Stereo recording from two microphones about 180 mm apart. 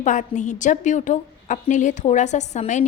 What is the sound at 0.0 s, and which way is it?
A woman's voice, 45° left (ahead or behind).